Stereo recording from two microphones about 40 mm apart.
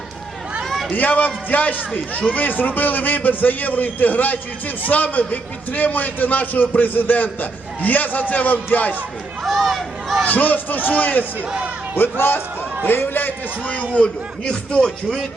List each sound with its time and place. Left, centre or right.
0.6 s a sound: centre
0.9 s a man's voice: left
9.4 s speech: centre
10.2 s a man's voice: left
11.9 s a man's voice: left
13.9 s speech: left
14.8 s speech: centre